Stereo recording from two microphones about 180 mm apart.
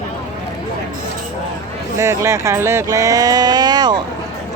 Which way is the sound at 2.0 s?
15° right (ahead or behind).